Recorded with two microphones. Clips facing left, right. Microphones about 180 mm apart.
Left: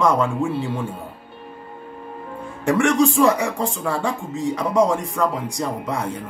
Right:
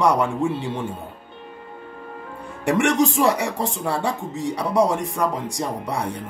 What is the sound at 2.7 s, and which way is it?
Speech, 20° right (ahead or behind).